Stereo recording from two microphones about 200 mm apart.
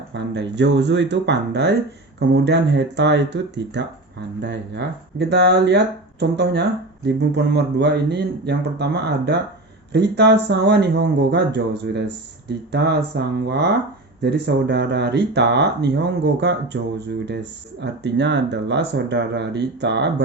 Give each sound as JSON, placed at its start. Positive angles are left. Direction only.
{"t": 0.1, "sound": "speech", "side_deg": -60}